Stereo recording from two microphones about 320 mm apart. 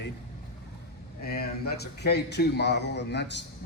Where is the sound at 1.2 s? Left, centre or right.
Left.